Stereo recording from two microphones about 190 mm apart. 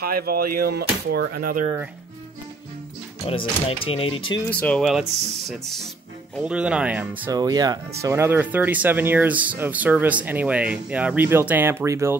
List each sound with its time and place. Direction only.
0.0 s speech: 55° right (ahead or behind)
3.3 s speech: 30° left (ahead or behind)
4.5 s speech: 5° left (ahead or behind)
6.4 s speech: 5° right (ahead or behind)
7.3 s speech: 20° right (ahead or behind)